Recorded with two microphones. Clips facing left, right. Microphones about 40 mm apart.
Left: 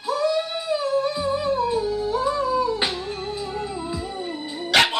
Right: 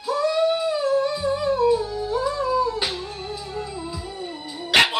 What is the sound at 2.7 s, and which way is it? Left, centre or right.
Music, left.